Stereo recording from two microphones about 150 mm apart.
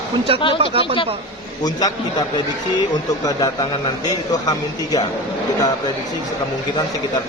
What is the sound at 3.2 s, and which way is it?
Speech, 25° left (ahead or behind).